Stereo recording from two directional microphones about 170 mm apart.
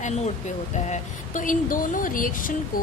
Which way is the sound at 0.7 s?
45° left (ahead or behind).